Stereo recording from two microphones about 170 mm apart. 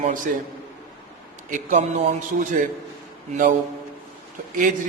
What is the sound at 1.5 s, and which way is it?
A man's voice, 45° right (ahead or behind).